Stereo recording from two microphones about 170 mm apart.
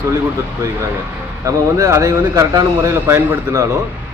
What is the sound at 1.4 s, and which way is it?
Speech, 20° right (ahead or behind).